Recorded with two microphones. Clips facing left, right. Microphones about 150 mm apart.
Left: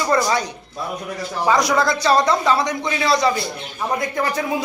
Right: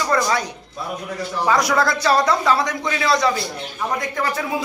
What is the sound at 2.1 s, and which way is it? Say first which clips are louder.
Speech: left 1 dB; 20° left (ahead or behind).